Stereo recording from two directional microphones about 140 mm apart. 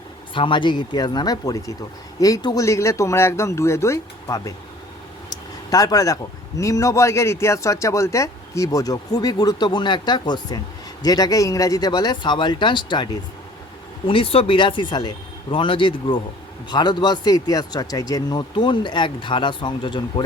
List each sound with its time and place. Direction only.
0.3 s speech: 35° left (ahead or behind)
5.3 s a sound: 25° left (ahead or behind)
6.6 s speech: 25° left (ahead or behind)
14.1 s speech: 40° left (ahead or behind)